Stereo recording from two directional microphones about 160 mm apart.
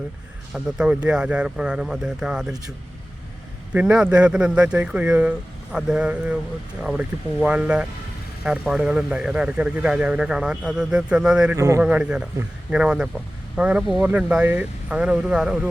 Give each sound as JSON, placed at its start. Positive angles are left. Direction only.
{"t": 0.5, "sound": "a man's voice", "side_deg": -5}
{"t": 3.8, "sound": "a man's voice", "side_deg": -5}
{"t": 11.5, "sound": "speech", "side_deg": -20}
{"t": 11.8, "sound": "a man's voice", "side_deg": -5}